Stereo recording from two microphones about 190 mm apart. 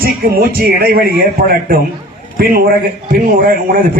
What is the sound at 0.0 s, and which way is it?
A man's voice, 50° right (ahead or behind).